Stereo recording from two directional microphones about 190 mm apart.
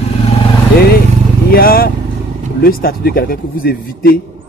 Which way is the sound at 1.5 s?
50° left (ahead or behind).